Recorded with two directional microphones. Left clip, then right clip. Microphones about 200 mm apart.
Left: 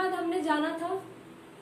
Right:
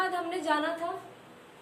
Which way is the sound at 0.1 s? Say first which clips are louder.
Left 1 dB; 20° right (ahead or behind).